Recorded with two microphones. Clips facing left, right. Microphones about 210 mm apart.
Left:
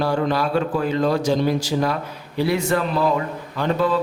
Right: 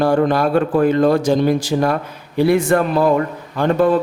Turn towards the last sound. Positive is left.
turn(degrees=-50)  # may be behind; listen again after turning